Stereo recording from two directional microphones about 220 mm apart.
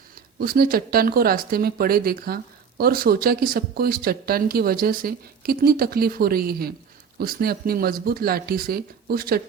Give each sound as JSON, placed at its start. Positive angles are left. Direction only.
{"t": 0.3, "sound": "speech", "side_deg": -45}